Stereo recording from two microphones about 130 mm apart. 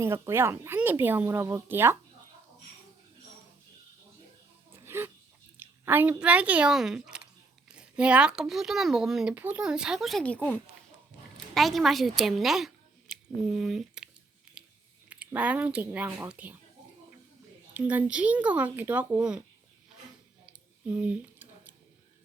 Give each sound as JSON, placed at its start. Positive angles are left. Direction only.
{"t": 0.0, "sound": "speech", "side_deg": -20}
{"t": 4.7, "sound": "a sound", "side_deg": -20}
{"t": 5.5, "sound": "speech", "side_deg": -15}
{"t": 9.3, "sound": "speech", "side_deg": -15}
{"t": 10.2, "sound": "speech", "side_deg": 10}
{"t": 14.5, "sound": "a sound", "side_deg": -5}
{"t": 15.1, "sound": "speech", "side_deg": -10}
{"t": 17.7, "sound": "speech", "side_deg": -10}
{"t": 20.8, "sound": "a sound", "side_deg": -10}